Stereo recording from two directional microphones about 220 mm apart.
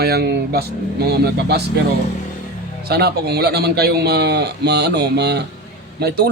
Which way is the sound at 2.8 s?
45° right (ahead or behind).